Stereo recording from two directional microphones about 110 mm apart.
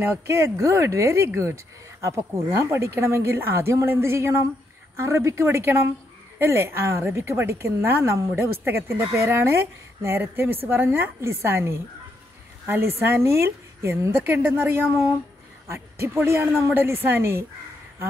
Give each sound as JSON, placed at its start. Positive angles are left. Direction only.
{"t": 0.0, "sound": "speech", "side_deg": -25}